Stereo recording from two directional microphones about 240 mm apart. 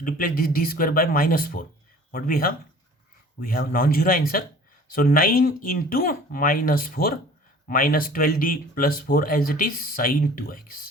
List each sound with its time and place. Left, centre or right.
0.0 s speech: left